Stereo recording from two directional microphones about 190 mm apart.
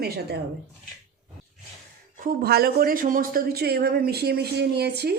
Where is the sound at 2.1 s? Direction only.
50° right (ahead or behind).